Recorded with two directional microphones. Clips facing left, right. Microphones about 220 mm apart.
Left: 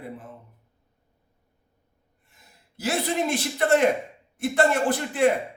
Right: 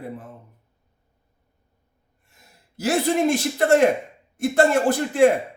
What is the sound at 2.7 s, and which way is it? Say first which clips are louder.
Speech: right 5 dB; 45° right (ahead or behind).